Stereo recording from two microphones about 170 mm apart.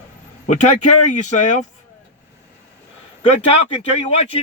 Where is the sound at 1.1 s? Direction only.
45° left (ahead or behind).